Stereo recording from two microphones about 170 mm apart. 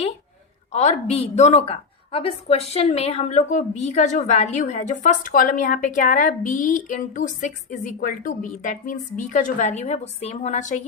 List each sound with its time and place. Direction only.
0.7 s a woman's voice: 40° left (ahead or behind)